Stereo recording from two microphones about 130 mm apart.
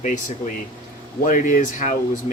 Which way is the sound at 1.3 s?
90° left.